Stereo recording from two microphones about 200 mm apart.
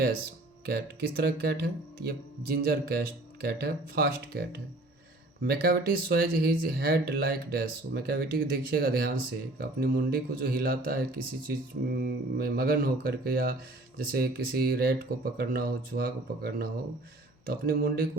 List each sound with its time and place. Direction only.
0.6 s speech: 50° right (ahead or behind)